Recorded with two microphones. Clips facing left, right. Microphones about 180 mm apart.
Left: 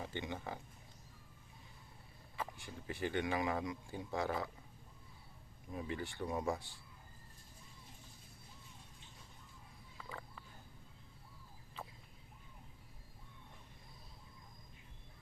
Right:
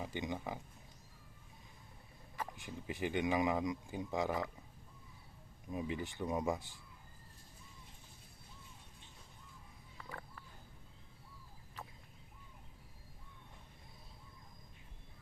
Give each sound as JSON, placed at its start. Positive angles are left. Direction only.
{"t": 0.1, "sound": "speech", "side_deg": -15}
{"t": 2.6, "sound": "speech", "side_deg": -15}
{"t": 5.7, "sound": "speech", "side_deg": -20}
{"t": 10.0, "sound": "a sound", "side_deg": 0}